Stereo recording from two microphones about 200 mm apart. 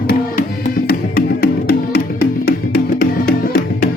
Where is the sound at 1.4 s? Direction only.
50° left (ahead or behind).